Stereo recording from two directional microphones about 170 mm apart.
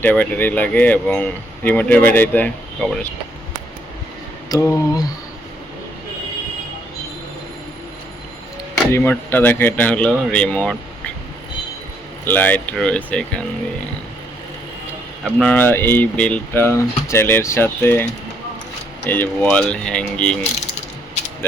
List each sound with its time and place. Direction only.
0.0 s speech: 10° left (ahead or behind)
4.4 s mantra: 20° left (ahead or behind)
8.9 s speech: 15° left (ahead or behind)
12.2 s speech: 10° left (ahead or behind)
15.2 s speech: 5° left (ahead or behind)